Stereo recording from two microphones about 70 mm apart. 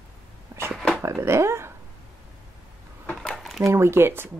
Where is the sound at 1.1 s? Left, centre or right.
Right.